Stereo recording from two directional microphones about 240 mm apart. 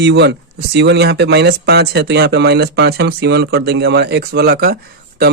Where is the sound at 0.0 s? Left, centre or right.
Right.